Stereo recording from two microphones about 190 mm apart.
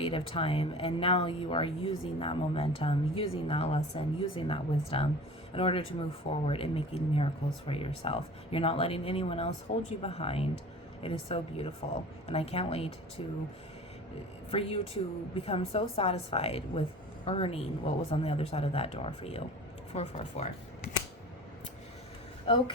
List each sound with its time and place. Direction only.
0.0 s a woman's voice: 30° left (ahead or behind)
14.5 s a woman's voice: 30° left (ahead or behind)
22.4 s speech: 25° left (ahead or behind)